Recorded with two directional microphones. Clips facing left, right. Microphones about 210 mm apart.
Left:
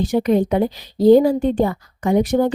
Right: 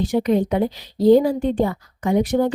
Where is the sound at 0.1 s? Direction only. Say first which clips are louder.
Left 3 dB; 45° left (ahead or behind).